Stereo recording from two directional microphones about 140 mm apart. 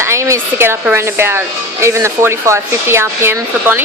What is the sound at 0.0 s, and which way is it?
Speech, 20° right (ahead or behind).